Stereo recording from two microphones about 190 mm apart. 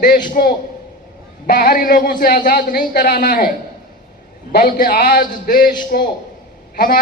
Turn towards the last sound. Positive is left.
turn(degrees=50)  # may be behind; listen again after turning